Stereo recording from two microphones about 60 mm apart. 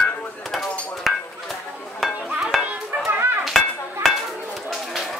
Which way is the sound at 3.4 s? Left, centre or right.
Centre.